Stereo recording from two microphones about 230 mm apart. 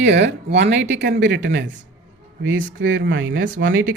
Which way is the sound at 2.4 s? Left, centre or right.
Right.